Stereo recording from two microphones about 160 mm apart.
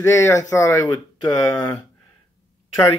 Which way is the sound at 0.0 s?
15° left (ahead or behind).